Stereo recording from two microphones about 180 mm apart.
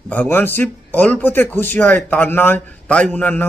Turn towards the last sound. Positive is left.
turn(degrees=10)  # may be behind; listen again after turning